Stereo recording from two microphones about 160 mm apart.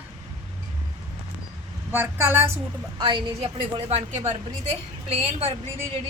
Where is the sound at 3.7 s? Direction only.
40° right (ahead or behind).